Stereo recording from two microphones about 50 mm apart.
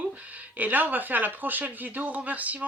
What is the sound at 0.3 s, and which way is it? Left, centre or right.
Speech, right.